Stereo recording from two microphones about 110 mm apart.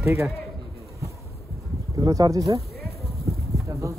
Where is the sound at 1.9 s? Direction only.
35° right (ahead or behind).